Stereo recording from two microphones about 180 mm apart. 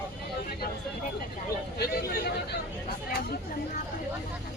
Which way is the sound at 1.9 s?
60° left (ahead or behind).